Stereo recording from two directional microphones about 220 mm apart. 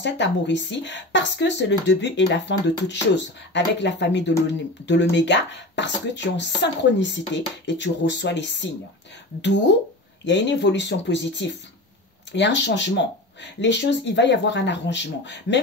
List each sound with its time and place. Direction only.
0.0 s speech: 55° left (ahead or behind)
10.2 s speech: 55° left (ahead or behind)